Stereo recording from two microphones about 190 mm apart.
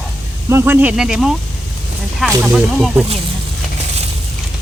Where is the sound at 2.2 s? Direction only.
5° right (ahead or behind).